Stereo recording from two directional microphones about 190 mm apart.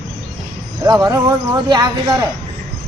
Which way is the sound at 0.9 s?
20° right (ahead or behind).